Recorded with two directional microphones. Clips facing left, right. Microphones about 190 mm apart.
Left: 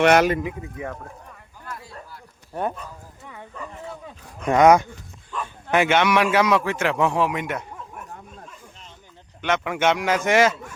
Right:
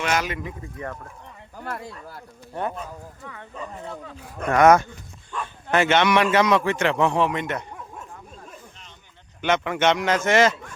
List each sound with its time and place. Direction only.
0.0 s speech: 60° left (ahead or behind)
0.4 s a man's voice: 10° left (ahead or behind)
1.5 s speech: 60° right (ahead or behind)
4.4 s a man's voice: 15° left (ahead or behind)
5.3 s bow-wow: 5° left (ahead or behind)
5.7 s a man's voice: 10° left (ahead or behind)
9.4 s a man's voice: 5° left (ahead or behind)